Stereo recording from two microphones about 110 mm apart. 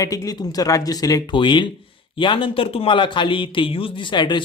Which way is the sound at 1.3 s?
45° left (ahead or behind).